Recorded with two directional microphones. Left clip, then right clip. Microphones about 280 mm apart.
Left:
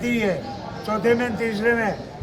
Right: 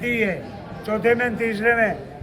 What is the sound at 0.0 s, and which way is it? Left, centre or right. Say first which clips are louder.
Speech: right 1 dB; centre.